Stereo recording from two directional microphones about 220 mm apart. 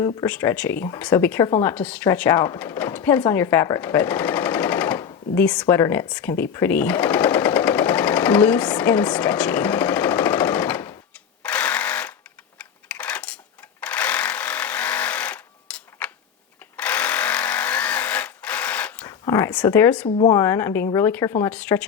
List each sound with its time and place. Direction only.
0.0 s speech: 10° left (ahead or behind)
6.5 s sewing machine: 10° left (ahead or behind)
11.4 s a sound: 5° left (ahead or behind)
13.8 s jackhammer: 5° left (ahead or behind)
16.7 s sewing machine: 5° left (ahead or behind)
19.2 s a sound: 15° left (ahead or behind)
20.1 s speech: 25° left (ahead or behind)
20.3 s speech: 10° left (ahead or behind)